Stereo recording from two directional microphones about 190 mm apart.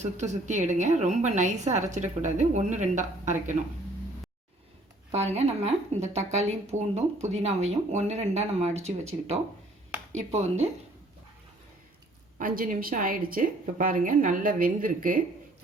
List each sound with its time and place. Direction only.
0.0 s speech: 40° right (ahead or behind)
5.1 s speech: 35° right (ahead or behind)
12.4 s a woman's voice: 45° right (ahead or behind)